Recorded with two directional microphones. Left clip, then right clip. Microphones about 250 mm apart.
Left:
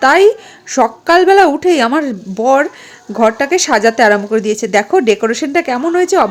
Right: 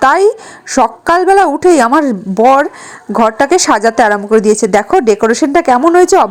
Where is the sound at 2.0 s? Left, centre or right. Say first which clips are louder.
Right 6 dB; centre.